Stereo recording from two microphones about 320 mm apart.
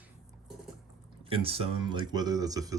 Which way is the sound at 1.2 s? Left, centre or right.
Centre.